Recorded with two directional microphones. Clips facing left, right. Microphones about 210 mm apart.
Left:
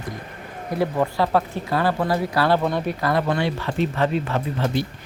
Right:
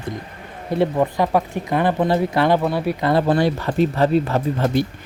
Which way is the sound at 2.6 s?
10° right (ahead or behind).